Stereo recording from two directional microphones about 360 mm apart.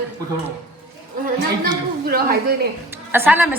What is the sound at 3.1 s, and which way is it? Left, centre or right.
Speech, centre.